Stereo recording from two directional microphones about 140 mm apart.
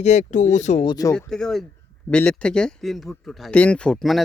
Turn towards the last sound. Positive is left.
turn(degrees=0)  # may be behind; listen again after turning